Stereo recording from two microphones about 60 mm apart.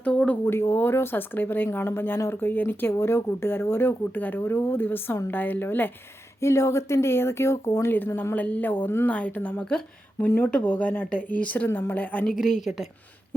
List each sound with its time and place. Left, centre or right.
0.0 s a sound: centre
0.4 s speech: left
2.9 s speech: left
6.4 s speech: left
7.9 s a woman's voice: left
10.2 s speech: left
10.6 s a woman's voice: left
12.4 s a woman's voice: centre